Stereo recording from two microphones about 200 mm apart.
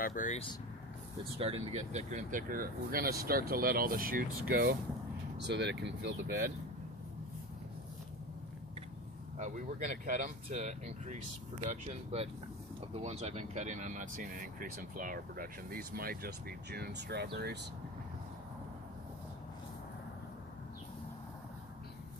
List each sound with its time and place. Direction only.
0.0 s speech: 40° left (ahead or behind)
1.2 s speech: 30° right (ahead or behind); by 6.5 s 50° right (ahead or behind)
9.4 s speech: 40° right (ahead or behind); by 17.6 s 55° right (ahead or behind)